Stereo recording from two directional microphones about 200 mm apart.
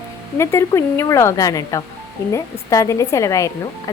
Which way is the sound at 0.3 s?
15° left (ahead or behind).